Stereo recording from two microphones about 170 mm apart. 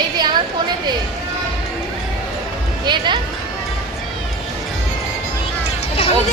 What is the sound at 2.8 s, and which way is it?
Speech, 25° right (ahead or behind).